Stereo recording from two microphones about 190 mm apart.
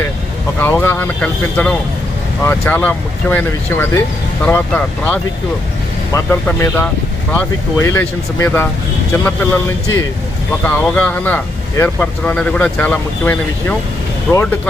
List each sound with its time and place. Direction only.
0.6 s speech: 15° left (ahead or behind)
6.1 s speech: 15° left (ahead or behind)